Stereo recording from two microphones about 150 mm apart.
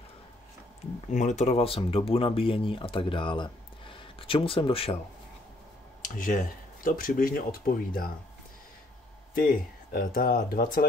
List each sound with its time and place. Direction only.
1.1 s speech: 55° left (ahead or behind); by 4.9 s 35° left (ahead or behind)
6.0 s speech: 60° left (ahead or behind)
9.3 s speech: 70° left (ahead or behind)